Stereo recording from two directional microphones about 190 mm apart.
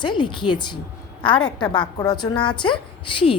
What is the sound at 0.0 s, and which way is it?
A woman's voice, 25° left (ahead or behind).